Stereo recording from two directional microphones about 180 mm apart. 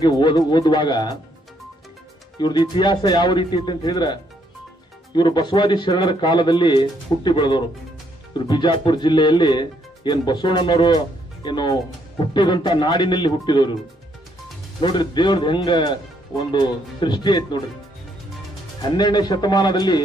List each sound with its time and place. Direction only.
0.0 s speech: 25° left (ahead or behind)
2.4 s speech: 25° left (ahead or behind)
14.8 s speech: 25° left (ahead or behind)
18.8 s speech: 25° left (ahead or behind)